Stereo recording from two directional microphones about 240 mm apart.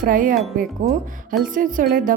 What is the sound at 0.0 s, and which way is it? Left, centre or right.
Speech, right.